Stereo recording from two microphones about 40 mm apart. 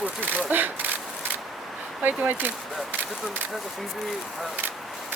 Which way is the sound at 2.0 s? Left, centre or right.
Right.